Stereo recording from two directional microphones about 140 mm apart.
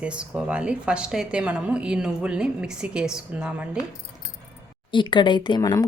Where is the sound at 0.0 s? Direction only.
10° right (ahead or behind).